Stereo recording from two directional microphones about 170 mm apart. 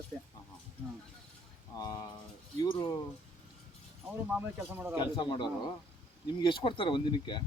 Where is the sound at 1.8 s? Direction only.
20° left (ahead or behind).